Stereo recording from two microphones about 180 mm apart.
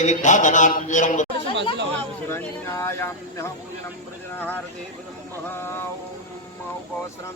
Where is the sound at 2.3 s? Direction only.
15° left (ahead or behind).